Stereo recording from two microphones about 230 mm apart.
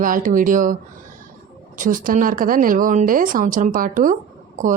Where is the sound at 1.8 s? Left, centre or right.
Right.